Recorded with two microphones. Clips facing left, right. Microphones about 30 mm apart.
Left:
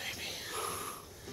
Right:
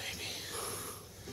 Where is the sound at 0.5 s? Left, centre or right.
Left.